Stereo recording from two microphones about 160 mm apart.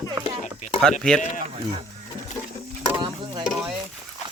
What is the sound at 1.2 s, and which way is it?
Speech, 50° left (ahead or behind).